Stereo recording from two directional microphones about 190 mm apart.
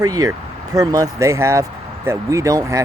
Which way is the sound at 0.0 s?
20° right (ahead or behind).